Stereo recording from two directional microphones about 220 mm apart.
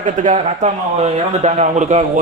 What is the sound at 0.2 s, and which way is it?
A man's voice, 30° right (ahead or behind).